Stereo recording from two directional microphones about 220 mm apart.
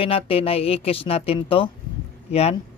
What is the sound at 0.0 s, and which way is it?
Speech, 25° left (ahead or behind).